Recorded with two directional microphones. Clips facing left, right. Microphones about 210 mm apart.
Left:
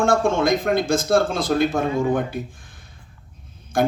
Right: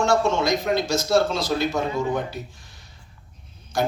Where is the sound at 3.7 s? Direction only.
50° left (ahead or behind).